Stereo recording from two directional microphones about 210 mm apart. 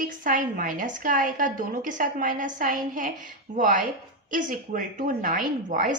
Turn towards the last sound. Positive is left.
turn(degrees=-40)  # may be behind; listen again after turning